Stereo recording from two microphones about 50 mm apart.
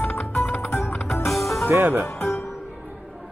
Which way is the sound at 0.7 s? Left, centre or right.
Left.